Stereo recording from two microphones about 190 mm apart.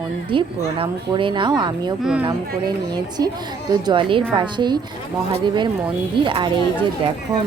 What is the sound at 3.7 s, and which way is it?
Speech, 25° right (ahead or behind).